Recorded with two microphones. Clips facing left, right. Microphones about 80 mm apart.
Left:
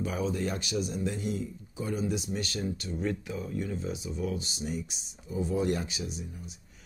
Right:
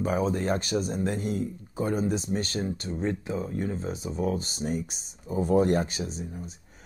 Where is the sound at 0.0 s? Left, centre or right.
Right.